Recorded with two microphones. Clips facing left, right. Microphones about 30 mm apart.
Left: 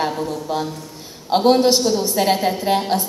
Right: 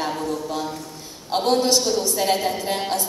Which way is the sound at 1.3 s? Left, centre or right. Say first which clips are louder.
Left 5 dB; left.